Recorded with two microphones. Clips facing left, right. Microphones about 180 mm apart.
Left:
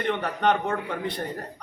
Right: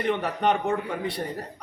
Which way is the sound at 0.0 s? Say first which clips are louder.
Even; 5° right (ahead or behind).